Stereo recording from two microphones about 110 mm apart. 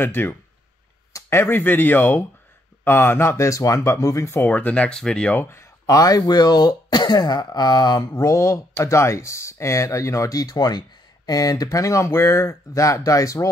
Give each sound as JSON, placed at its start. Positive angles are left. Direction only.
{"t": 0.0, "sound": "speech", "side_deg": 20}
{"t": 4.4, "sound": "speech", "side_deg": 15}